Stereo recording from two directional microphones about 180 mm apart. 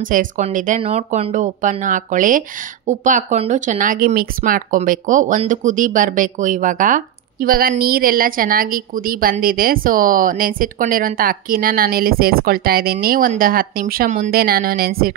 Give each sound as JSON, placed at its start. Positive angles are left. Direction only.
{"t": 0.1, "sound": "a woman's voice", "side_deg": -45}